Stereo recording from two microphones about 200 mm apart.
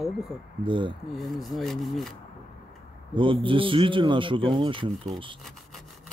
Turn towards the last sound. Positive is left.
turn(degrees=-25)  # may be behind; listen again after turning